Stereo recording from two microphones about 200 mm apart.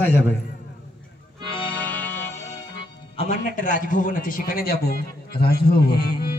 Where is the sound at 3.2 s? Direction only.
40° left (ahead or behind).